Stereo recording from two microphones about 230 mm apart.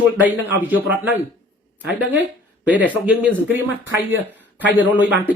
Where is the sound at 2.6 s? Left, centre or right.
Centre.